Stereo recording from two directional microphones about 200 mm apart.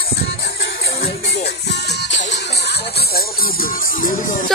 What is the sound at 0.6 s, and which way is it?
Music, 55° left (ahead or behind).